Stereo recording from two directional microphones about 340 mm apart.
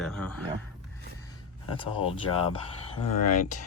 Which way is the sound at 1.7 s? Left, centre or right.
Centre.